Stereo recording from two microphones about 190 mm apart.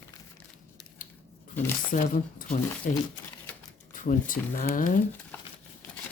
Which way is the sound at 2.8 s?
45° left (ahead or behind).